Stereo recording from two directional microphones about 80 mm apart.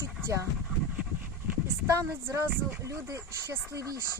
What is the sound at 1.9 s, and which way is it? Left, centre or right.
Speech, right.